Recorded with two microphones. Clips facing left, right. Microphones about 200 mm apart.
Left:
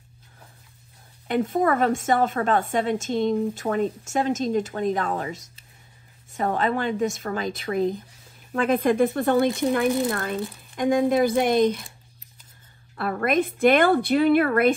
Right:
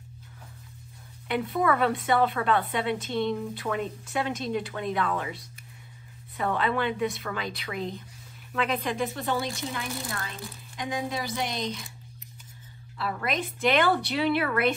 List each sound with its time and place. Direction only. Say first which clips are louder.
1.2 s a woman's voice: left 4 dB; 45° left (ahead or behind)
12.9 s a woman's voice: left 8 dB; 55° left (ahead or behind)